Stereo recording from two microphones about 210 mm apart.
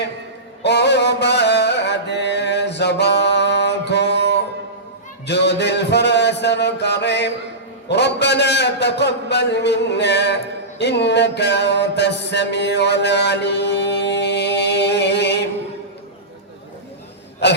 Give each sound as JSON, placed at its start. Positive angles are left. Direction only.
{"t": 0.6, "sound": "mantra", "side_deg": 55}
{"t": 5.2, "sound": "a sound", "side_deg": 55}
{"t": 7.9, "sound": "a man's voice", "side_deg": 55}
{"t": 10.8, "sound": "music", "side_deg": 55}